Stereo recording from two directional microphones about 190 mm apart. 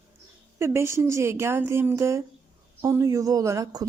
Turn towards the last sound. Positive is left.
turn(degrees=-20)  # may be behind; listen again after turning